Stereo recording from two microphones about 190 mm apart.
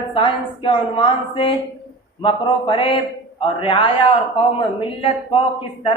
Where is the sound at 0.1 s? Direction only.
25° left (ahead or behind).